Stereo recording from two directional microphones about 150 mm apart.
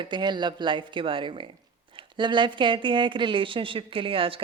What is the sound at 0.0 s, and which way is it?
A woman's voice, 30° right (ahead or behind).